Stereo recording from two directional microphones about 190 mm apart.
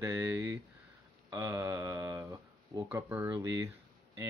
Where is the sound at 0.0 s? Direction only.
10° right (ahead or behind).